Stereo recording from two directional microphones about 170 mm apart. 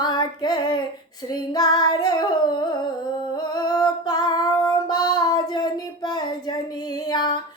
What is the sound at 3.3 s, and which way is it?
Music, 25° left (ahead or behind).